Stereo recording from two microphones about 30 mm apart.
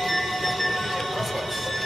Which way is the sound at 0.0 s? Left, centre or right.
Centre.